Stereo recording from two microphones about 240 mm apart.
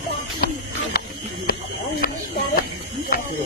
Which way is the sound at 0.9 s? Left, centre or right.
Left.